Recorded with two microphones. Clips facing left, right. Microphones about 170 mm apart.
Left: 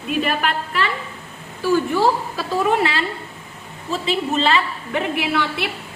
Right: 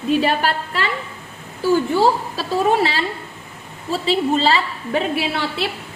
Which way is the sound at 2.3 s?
35° right (ahead or behind).